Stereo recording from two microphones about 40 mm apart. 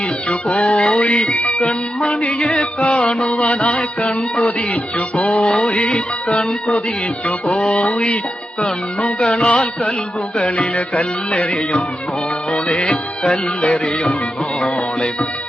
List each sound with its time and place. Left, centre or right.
0.3 s music: left